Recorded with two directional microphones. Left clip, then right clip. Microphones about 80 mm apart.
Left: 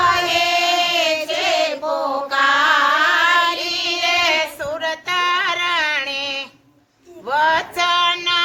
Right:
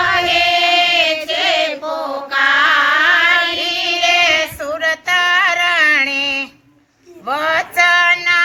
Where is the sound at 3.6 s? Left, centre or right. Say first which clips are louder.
Right 4 dB; left.